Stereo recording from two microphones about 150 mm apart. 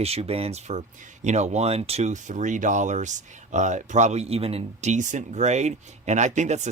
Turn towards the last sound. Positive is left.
turn(degrees=-50)  # may be behind; listen again after turning